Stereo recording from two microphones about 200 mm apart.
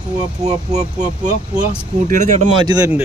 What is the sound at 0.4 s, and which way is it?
Speech, 35° right (ahead or behind).